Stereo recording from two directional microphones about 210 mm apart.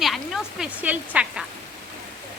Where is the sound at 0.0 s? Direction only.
Centre (ahead or behind).